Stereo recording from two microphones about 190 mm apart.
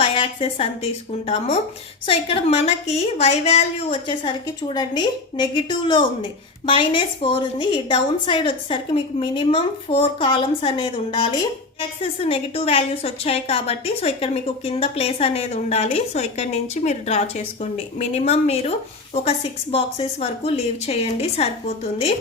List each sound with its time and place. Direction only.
0.0 s a woman's voice: 30° left (ahead or behind)
2.0 s a woman's voice: 30° left (ahead or behind)
19.7 s a woman's voice: 30° left (ahead or behind)